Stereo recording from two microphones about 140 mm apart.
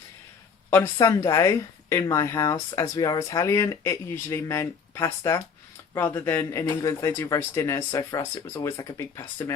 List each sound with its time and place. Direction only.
0.9 s speech: 25° left (ahead or behind)